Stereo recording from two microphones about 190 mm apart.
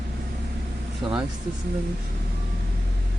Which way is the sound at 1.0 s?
25° right (ahead or behind).